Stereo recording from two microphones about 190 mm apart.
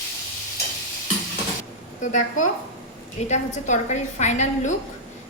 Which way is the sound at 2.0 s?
40° left (ahead or behind).